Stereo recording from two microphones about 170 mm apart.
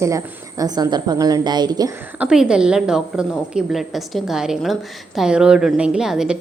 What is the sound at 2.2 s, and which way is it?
A woman's voice, 5° right (ahead or behind).